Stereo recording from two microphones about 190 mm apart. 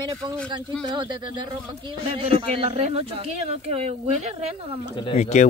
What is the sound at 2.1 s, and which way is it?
Speech, 30° right (ahead or behind).